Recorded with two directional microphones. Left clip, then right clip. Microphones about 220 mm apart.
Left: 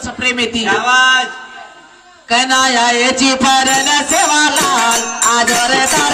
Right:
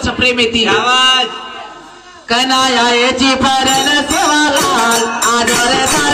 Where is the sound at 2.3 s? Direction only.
35° left (ahead or behind).